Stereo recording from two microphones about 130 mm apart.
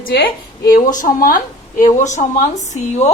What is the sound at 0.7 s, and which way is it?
Speech, 85° left.